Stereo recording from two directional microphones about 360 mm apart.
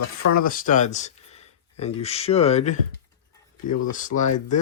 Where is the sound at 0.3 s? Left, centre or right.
Left.